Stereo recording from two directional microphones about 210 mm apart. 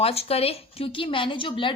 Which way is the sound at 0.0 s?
30° left (ahead or behind).